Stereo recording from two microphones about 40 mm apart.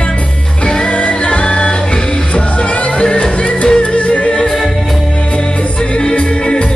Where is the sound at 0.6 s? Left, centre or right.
Centre.